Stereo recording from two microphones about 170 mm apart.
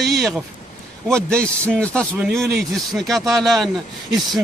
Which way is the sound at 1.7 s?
5° left (ahead or behind).